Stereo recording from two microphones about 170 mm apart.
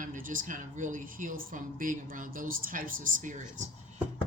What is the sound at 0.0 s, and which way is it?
Speech, 50° right (ahead or behind).